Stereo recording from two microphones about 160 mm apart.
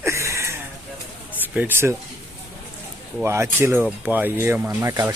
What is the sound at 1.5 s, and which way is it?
Speech, 15° right (ahead or behind).